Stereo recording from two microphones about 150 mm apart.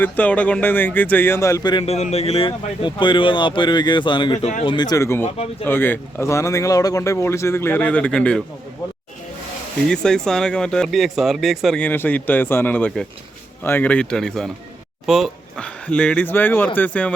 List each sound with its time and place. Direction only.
0.0 s speech: 10° left (ahead or behind)
1.8 s speech: 45° left (ahead or behind); by 8.4 s 5° left (ahead or behind)
9.8 s speech: 5° left (ahead or behind)